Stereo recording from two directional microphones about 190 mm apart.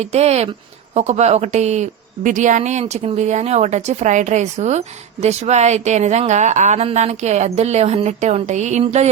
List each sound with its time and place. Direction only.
0.0 s a woman's voice: 35° right (ahead or behind)